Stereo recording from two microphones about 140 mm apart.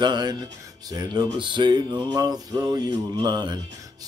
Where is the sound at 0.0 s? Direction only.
30° right (ahead or behind).